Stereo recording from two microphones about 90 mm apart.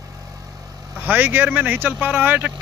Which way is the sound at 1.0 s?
20° right (ahead or behind).